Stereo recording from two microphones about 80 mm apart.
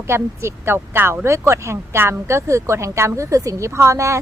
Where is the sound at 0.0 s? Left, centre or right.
Right.